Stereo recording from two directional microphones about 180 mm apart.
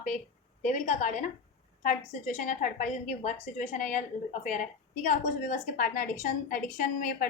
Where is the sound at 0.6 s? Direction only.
45° left (ahead or behind).